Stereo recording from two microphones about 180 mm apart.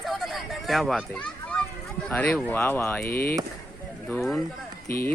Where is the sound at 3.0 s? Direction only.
55° left (ahead or behind).